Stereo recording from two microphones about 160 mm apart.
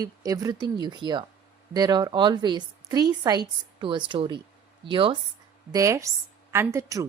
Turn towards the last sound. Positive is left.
turn(degrees=-20)  # may be behind; listen again after turning